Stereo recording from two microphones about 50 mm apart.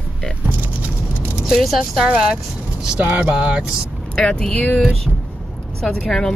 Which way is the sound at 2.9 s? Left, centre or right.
Right.